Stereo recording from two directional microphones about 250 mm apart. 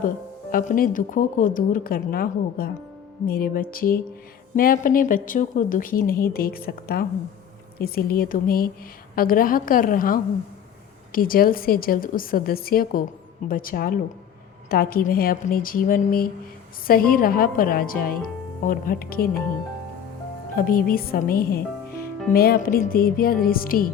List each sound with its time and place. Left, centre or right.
0.5 s a woman's voice: left
20.6 s a woman's voice: left